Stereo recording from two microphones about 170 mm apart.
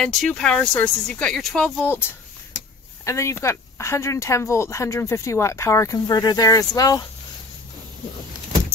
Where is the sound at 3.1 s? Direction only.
15° left (ahead or behind).